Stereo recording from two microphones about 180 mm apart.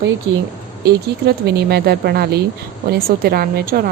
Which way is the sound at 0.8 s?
65° right (ahead or behind).